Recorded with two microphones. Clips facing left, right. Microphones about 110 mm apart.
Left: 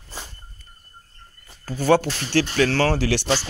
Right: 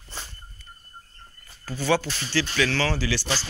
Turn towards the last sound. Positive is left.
turn(degrees=65)  # may be behind; listen again after turning